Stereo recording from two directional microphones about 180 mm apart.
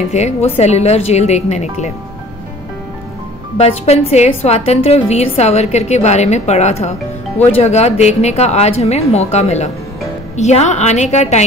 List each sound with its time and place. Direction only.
0.1 s a woman's voice: 35° left (ahead or behind)
3.5 s a woman's voice: 35° left (ahead or behind)